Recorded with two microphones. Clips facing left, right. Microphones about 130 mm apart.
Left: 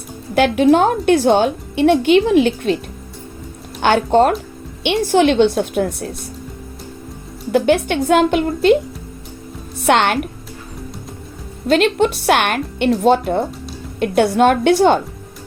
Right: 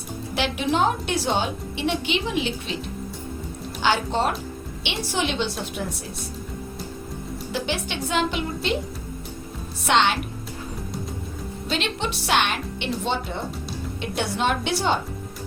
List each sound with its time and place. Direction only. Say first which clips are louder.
0.3 s a woman's voice: left 11 dB; 55° left (ahead or behind)
7.5 s speech: left 14 dB; 55° left (ahead or behind)
9.8 s speech: left 6 dB; 55° left (ahead or behind)
11.7 s a woman's voice: left 13 dB; 55° left (ahead or behind)